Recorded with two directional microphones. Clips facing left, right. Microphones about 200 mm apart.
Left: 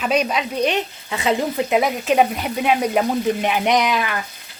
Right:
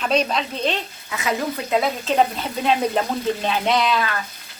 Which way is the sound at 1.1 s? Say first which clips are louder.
Left 4 dB; 30° left (ahead or behind).